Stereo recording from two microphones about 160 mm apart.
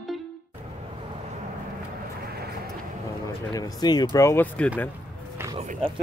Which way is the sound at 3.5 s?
25° left (ahead or behind).